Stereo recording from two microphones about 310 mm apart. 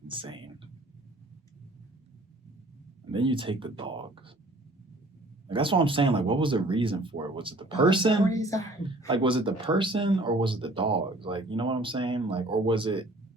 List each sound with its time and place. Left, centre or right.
0.1 s speech: centre
3.1 s speech: centre
5.5 s speech: centre
8.3 s a woman's voice: centre
9.0 s speech: centre